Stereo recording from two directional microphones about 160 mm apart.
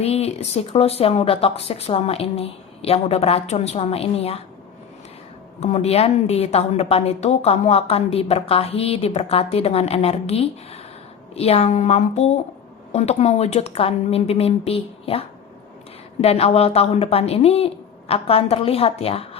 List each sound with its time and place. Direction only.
0.0 s a woman's voice: 40° left (ahead or behind)
5.5 s a woman's voice: 40° left (ahead or behind)